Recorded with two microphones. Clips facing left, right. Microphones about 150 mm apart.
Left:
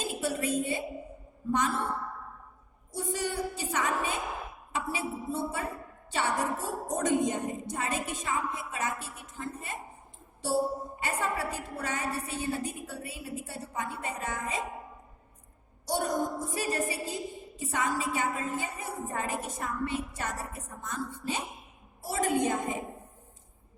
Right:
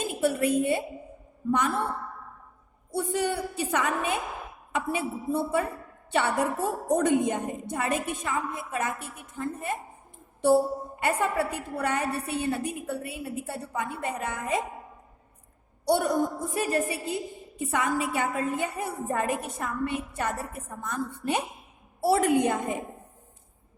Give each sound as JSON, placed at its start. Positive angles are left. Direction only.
{"t": 0.0, "sound": "a woman's voice", "side_deg": -55}
{"t": 2.9, "sound": "a woman's voice", "side_deg": -60}
{"t": 11.0, "sound": "a woman's voice", "side_deg": -60}
{"t": 15.9, "sound": "a woman's voice", "side_deg": -60}